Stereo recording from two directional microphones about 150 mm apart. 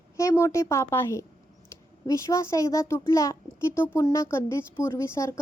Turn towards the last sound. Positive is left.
turn(degrees=20)  # may be behind; listen again after turning